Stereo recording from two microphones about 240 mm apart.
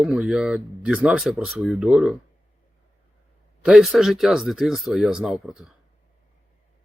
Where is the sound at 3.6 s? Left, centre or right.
Centre.